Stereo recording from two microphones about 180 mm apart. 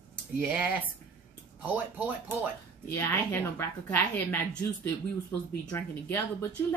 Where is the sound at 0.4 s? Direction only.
10° right (ahead or behind).